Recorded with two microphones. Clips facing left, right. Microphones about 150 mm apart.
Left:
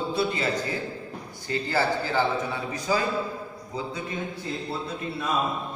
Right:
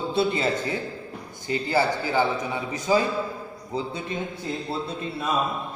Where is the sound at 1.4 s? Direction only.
15° right (ahead or behind).